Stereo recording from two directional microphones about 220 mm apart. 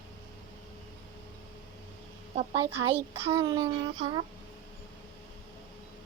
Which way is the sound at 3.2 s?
15° right (ahead or behind).